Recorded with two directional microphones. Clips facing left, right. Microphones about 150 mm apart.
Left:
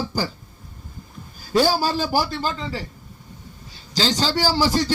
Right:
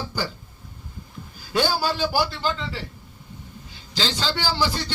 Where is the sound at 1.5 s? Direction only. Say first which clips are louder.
Left 4 dB; 40° left (ahead or behind).